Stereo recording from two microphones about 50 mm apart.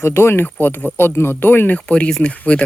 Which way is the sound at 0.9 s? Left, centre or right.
Left.